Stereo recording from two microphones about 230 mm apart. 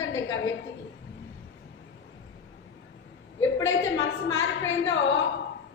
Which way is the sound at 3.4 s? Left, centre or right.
Left.